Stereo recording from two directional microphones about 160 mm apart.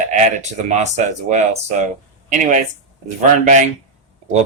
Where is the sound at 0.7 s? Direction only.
45° right (ahead or behind).